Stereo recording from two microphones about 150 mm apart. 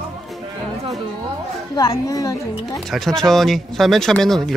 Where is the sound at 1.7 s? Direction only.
25° left (ahead or behind).